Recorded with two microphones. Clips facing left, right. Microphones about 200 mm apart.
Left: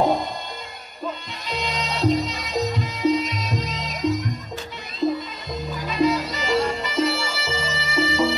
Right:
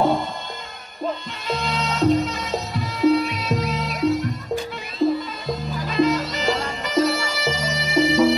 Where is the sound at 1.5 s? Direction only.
15° left (ahead or behind).